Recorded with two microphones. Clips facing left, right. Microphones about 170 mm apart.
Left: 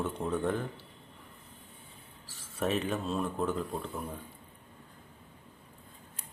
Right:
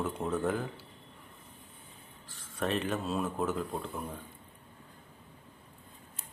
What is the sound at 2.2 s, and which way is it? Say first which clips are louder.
Speech: left 1 dB; 5° left (ahead or behind).